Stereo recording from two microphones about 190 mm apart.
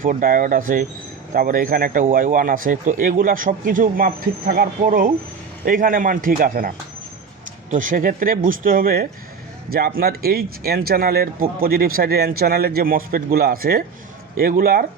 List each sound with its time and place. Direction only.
0.0 s speech: 45° right (ahead or behind)
7.7 s speech: 45° right (ahead or behind)